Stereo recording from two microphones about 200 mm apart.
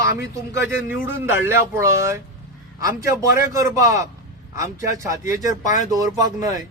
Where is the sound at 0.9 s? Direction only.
10° right (ahead or behind).